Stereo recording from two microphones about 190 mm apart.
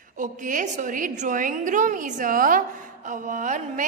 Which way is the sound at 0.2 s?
45° right (ahead or behind).